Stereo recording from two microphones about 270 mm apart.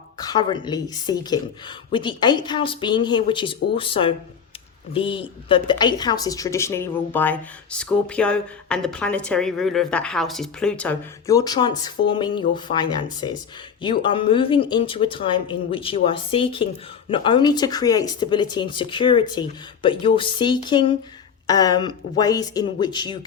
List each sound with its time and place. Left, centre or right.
0.2 s a woman's voice: centre